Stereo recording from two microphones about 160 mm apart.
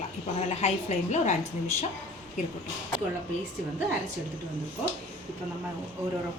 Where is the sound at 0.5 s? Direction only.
45° left (ahead or behind).